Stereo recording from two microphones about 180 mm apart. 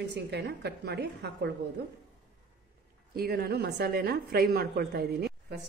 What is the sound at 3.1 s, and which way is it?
A woman's voice, 60° right (ahead or behind).